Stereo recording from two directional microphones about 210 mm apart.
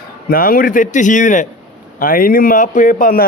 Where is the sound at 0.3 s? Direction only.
45° left (ahead or behind).